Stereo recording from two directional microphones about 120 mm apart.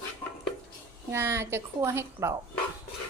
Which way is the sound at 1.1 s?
20° right (ahead or behind).